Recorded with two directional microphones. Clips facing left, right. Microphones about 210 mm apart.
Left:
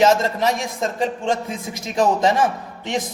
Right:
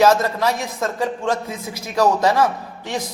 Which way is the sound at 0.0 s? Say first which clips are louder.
Right 1 dB; 20° left (ahead or behind).